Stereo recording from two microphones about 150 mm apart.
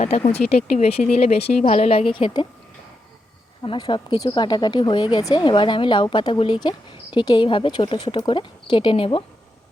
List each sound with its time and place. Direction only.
0.0 s speech: 45° left (ahead or behind)
3.6 s speech: 30° left (ahead or behind)